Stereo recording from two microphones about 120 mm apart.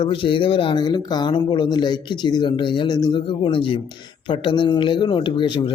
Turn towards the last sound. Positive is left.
turn(degrees=40)  # may be behind; listen again after turning